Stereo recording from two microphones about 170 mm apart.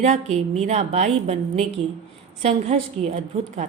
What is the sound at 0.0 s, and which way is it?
A woman's voice, 40° right (ahead or behind).